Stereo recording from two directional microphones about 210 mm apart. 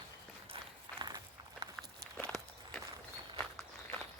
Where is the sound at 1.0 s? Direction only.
20° right (ahead or behind).